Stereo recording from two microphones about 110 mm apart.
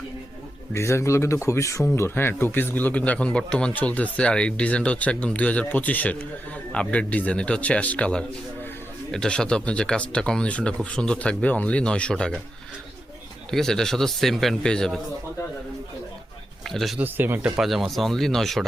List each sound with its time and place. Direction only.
0.7 s a man's voice: 25° left (ahead or behind); by 12.4 s 5° left (ahead or behind)
13.5 s a man's voice: 5° left (ahead or behind)
16.6 s a man's voice: centre (ahead or behind)
17.0 s speech: 20° right (ahead or behind)
17.6 s a man's voice: centre (ahead or behind)